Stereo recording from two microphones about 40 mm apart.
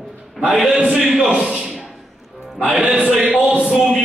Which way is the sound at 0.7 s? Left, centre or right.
Right.